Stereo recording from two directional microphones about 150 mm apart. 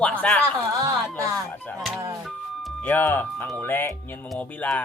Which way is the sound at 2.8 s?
10° left (ahead or behind).